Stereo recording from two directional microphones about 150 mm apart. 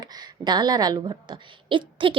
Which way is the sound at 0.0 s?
25° right (ahead or behind).